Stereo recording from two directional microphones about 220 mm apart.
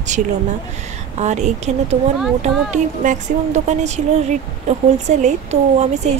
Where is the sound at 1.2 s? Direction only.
30° right (ahead or behind).